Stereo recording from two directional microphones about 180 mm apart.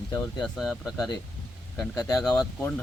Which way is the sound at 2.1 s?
5° left (ahead or behind).